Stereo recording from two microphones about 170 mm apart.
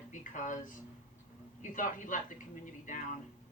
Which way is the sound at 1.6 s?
50° left (ahead or behind).